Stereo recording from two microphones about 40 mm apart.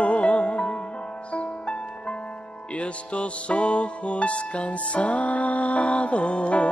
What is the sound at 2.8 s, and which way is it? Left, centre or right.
Music, left.